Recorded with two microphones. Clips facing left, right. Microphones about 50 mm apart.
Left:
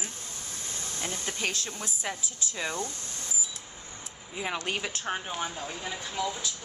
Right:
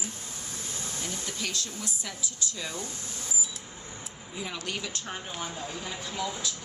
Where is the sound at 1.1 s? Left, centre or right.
Left.